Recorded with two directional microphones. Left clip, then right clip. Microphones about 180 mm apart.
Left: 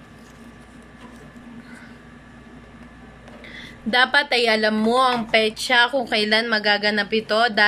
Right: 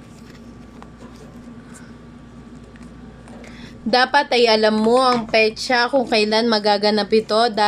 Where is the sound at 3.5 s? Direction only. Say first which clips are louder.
Right 2 dB; 10° right (ahead or behind).